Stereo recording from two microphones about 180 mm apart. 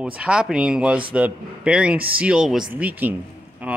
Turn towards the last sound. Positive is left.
turn(degrees=-5)  # may be behind; listen again after turning